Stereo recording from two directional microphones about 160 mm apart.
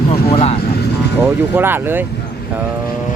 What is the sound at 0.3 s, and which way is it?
Vehicle, 40° left (ahead or behind).